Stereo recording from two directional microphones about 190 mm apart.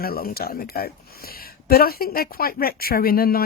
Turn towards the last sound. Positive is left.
turn(degrees=50)  # may be behind; listen again after turning